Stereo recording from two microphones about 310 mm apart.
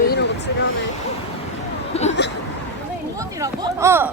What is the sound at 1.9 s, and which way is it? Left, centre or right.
Speech, centre.